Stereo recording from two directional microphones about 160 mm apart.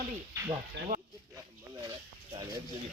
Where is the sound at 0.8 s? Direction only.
90° right.